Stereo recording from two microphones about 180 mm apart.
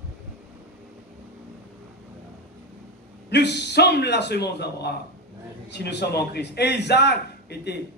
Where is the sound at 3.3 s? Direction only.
70° left (ahead or behind).